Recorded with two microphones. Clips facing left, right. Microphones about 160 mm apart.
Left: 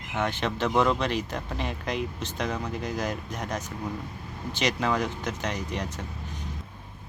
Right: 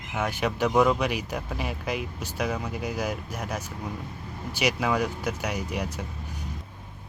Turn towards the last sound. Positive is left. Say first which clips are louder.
# right 2 dB
turn(degrees=-10)  # may be behind; listen again after turning